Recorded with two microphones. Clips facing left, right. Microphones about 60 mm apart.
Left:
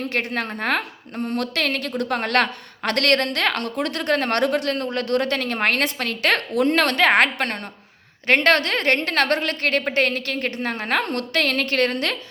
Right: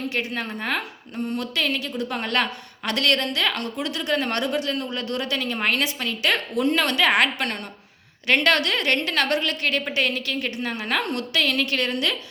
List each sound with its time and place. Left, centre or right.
0.0 s a woman's voice: left